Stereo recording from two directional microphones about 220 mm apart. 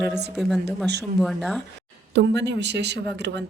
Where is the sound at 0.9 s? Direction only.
50° right (ahead or behind).